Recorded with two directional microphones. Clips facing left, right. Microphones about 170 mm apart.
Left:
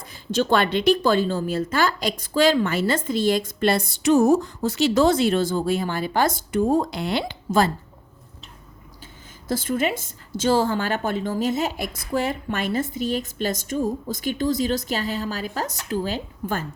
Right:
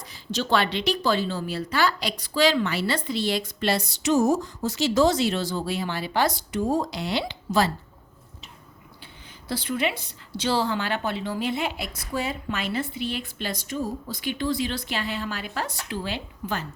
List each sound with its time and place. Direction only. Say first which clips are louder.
0.0 s a woman's voice: left 6 dB; 50° left (ahead or behind)
9.5 s a woman's voice: left 4 dB; 45° left (ahead or behind)